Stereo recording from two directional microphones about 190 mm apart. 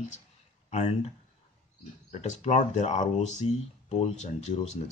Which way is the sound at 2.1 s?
35° left (ahead or behind).